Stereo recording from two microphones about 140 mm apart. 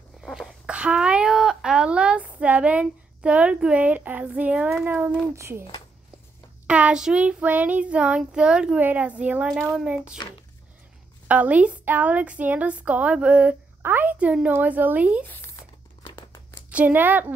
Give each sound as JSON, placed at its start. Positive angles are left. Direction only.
{"t": 0.2, "sound": "speech", "side_deg": -5}
{"t": 5.3, "sound": "speech", "side_deg": -20}
{"t": 6.7, "sound": "speech", "side_deg": -5}
{"t": 11.2, "sound": "speech", "side_deg": -10}
{"t": 16.7, "sound": "speech", "side_deg": -15}